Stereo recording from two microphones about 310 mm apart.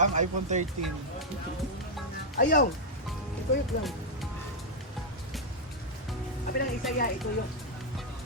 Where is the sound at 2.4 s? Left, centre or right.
Left.